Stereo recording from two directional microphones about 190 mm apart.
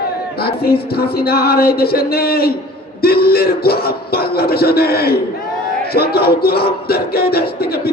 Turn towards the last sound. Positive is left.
turn(degrees=55)  # may be behind; listen again after turning